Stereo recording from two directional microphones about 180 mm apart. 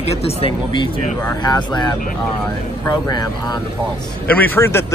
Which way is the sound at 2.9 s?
25° left (ahead or behind).